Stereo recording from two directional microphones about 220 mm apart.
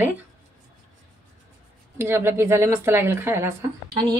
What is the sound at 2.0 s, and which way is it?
A woman's voice, 10° right (ahead or behind).